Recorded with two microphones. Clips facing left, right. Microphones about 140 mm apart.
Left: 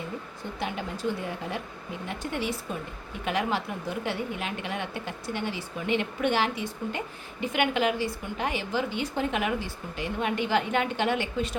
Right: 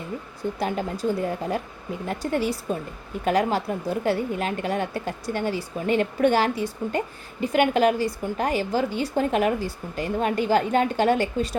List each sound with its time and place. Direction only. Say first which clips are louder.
0.6 s a woman's voice: right 4 dB; 40° right (ahead or behind)